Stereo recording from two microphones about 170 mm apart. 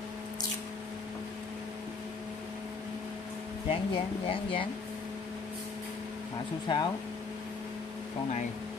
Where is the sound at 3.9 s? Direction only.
30° left (ahead or behind).